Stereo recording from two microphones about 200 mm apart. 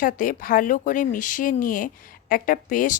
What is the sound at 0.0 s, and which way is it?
Speech, 45° left (ahead or behind).